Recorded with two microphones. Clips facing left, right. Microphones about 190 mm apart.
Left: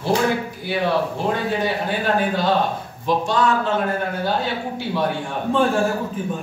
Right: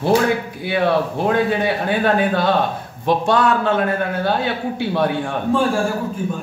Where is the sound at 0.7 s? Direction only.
60° right (ahead or behind).